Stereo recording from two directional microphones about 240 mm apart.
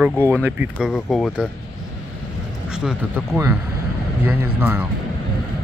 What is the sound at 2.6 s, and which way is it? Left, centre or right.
Speech, centre.